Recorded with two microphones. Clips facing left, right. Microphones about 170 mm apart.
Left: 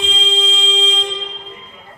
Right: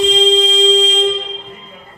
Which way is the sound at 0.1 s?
40° right (ahead or behind).